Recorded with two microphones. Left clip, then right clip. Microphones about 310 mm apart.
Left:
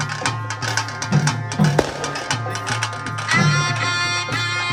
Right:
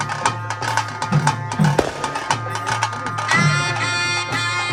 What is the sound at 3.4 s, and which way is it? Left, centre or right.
Music, left.